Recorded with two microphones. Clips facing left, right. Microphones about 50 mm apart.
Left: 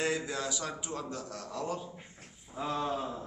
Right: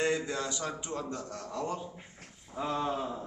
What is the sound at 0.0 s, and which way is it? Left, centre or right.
A man's voice, centre.